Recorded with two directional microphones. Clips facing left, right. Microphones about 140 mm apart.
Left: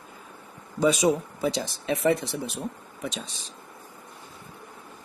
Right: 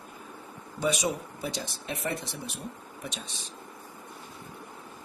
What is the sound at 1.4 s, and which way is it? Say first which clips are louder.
Speech: left 8 dB; 90° left.